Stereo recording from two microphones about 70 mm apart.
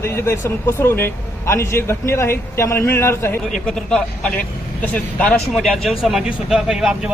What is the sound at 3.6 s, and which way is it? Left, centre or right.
Speech, centre.